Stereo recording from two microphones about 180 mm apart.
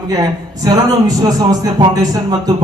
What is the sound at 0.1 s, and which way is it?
A man's voice, 20° right (ahead or behind).